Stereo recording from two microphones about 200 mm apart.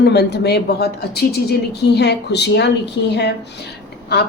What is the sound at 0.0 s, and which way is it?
A woman's voice, 55° left (ahead or behind).